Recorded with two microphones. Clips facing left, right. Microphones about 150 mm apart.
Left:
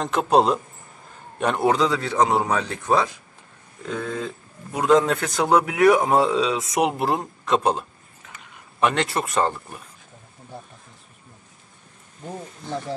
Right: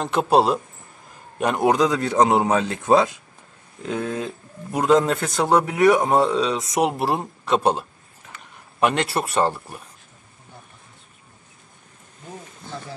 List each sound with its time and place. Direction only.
0.0 s a man's voice: 5° right (ahead or behind); by 4.3 s 20° right (ahead or behind)
4.7 s a man's voice: 5° right (ahead or behind)